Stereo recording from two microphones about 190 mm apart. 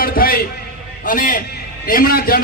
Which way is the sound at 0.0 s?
50° left (ahead or behind).